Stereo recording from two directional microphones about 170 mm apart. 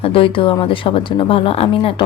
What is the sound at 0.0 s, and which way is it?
Speech, 30° left (ahead or behind).